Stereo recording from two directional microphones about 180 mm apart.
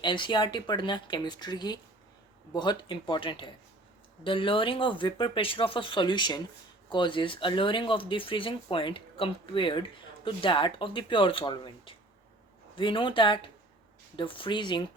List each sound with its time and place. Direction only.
0.0 s speech: 25° left (ahead or behind)